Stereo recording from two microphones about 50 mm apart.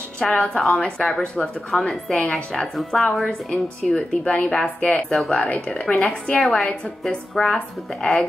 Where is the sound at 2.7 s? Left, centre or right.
Centre.